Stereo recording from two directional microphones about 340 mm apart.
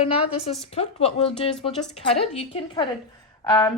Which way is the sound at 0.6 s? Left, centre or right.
Centre.